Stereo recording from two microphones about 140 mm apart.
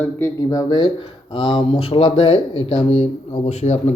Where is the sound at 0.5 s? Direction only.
30° left (ahead or behind).